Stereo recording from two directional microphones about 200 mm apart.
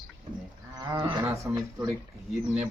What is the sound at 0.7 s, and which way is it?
Speech, 15° right (ahead or behind).